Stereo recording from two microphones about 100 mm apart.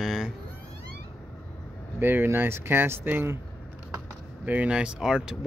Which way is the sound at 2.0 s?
20° right (ahead or behind).